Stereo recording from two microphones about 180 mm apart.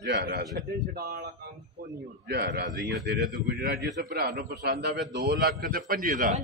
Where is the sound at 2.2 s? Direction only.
65° right (ahead or behind); by 6.4 s 45° right (ahead or behind).